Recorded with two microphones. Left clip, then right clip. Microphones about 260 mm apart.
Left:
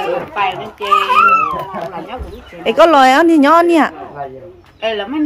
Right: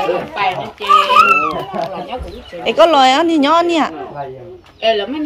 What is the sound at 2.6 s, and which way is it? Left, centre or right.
A woman's voice, centre.